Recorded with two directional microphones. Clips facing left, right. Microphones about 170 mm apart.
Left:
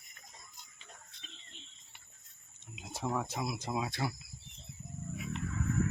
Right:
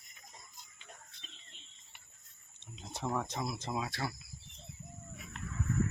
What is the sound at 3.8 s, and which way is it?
Speech, 20° left (ahead or behind).